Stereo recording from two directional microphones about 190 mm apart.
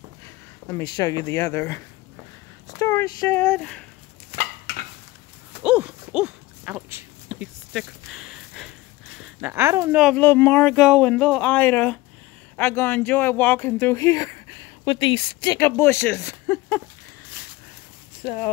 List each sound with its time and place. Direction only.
0.7 s speech: 20° left (ahead or behind)
2.8 s speech: 15° left (ahead or behind)
5.6 s a sound: 5° right (ahead or behind)
9.2 s speech: 10° right (ahead or behind)
10.0 s speech: 10° left (ahead or behind)
14.9 s speech: 25° left (ahead or behind); by 16.8 s 10° left (ahead or behind)
18.2 s speech: 25° left (ahead or behind)